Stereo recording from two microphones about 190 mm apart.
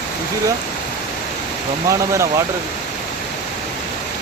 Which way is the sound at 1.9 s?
15° right (ahead or behind).